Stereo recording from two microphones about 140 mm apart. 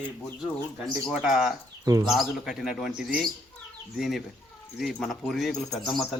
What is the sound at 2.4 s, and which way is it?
Speech, centre (ahead or behind).